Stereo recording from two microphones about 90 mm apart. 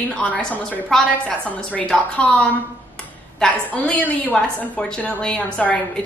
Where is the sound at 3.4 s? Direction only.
10° left (ahead or behind).